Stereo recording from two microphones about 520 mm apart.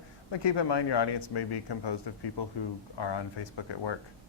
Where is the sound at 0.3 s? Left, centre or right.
Left.